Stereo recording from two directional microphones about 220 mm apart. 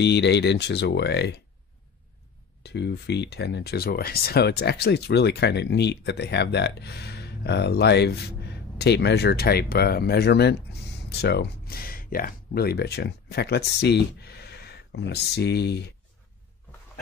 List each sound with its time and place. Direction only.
0.0 s speech: 50° left (ahead or behind)
2.6 s speech: 50° left (ahead or behind)